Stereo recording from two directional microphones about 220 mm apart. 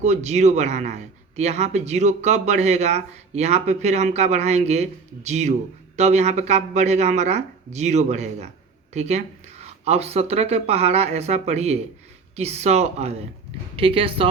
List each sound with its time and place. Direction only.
0.0 s speech: 30° right (ahead or behind)